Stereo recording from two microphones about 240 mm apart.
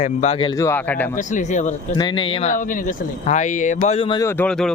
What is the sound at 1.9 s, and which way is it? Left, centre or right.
Speech, centre.